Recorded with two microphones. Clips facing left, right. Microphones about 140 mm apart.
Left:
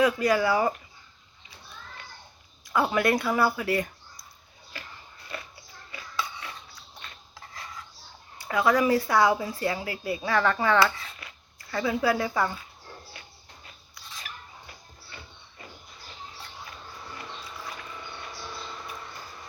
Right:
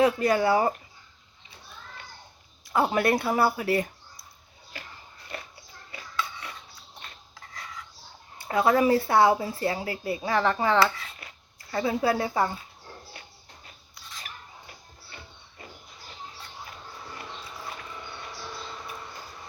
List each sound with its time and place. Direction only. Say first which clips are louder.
0.0 s a woman's voice: right 1 dB; 30° right (ahead or behind)
2.6 s speech: right 1 dB; 30° right (ahead or behind)
8.4 s a woman's voice: right 1 dB; 30° right (ahead or behind)